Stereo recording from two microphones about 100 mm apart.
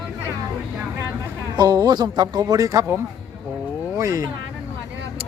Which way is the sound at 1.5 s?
40° right (ahead or behind).